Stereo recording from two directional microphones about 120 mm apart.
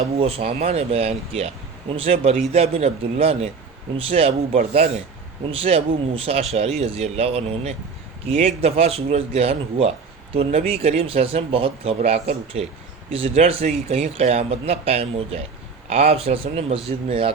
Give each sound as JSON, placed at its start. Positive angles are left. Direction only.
{"t": 0.0, "sound": "speech", "side_deg": -55}